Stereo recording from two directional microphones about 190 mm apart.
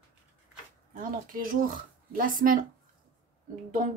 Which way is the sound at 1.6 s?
45° right (ahead or behind).